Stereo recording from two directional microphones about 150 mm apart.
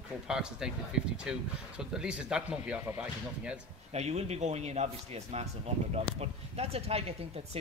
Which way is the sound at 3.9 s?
45° right (ahead or behind).